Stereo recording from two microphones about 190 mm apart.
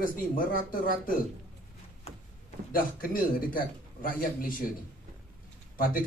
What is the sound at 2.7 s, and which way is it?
A man's voice, 50° left (ahead or behind).